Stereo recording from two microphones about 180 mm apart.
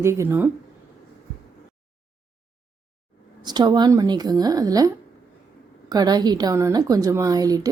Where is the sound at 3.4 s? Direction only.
25° right (ahead or behind).